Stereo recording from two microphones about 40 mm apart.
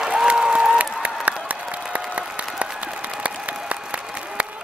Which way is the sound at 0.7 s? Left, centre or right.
Right.